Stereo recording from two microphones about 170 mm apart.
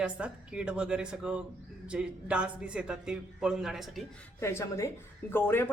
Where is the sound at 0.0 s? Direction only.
5° right (ahead or behind).